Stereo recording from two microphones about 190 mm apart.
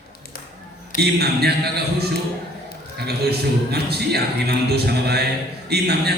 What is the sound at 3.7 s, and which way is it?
A man's voice, 60° right (ahead or behind).